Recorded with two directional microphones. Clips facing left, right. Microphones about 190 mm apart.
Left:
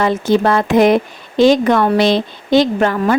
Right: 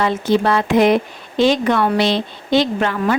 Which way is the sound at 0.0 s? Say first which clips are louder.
Left 3 dB; 45° left (ahead or behind).